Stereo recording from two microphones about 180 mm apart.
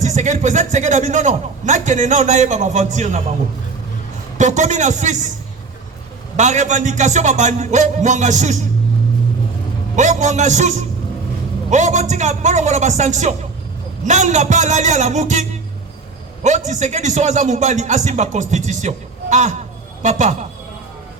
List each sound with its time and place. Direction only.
0.0 s a man's voice: 40° right (ahead or behind)
4.4 s a man's voice: 40° right (ahead or behind)
6.3 s a man's voice: 40° right (ahead or behind)
9.9 s a man's voice: 40° right (ahead or behind)